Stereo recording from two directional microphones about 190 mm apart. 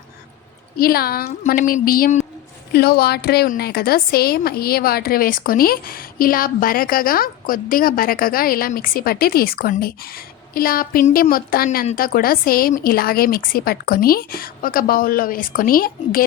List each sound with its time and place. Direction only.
0.8 s a woman's voice: 50° left (ahead or behind)
2.7 s a woman's voice: 55° left (ahead or behind)